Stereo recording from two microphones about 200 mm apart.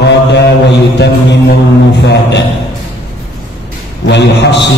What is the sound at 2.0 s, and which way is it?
Speech, 60° left (ahead or behind).